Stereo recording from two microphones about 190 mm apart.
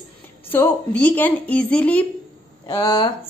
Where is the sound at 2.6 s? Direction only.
25° left (ahead or behind).